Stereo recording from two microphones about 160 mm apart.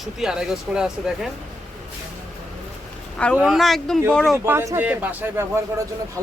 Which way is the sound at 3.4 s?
Centre (ahead or behind).